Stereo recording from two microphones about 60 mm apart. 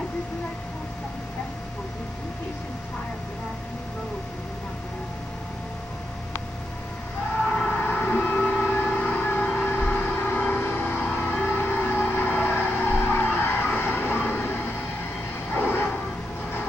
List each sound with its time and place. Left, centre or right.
7.8 s train: left
15.5 s vehicle: left